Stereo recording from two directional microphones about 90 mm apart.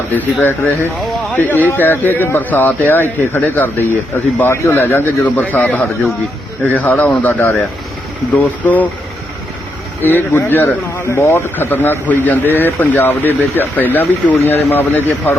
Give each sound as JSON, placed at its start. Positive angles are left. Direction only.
{"t": 0.2, "sound": "speech", "side_deg": 20}
{"t": 10.0, "sound": "speech", "side_deg": 25}